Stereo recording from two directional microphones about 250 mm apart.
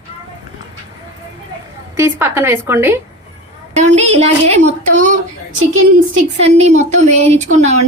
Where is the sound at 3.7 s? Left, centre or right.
Right.